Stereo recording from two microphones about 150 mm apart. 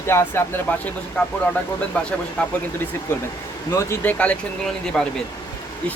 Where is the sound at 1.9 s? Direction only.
10° left (ahead or behind).